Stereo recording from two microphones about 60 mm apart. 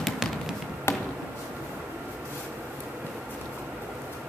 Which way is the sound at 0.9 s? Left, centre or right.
Left.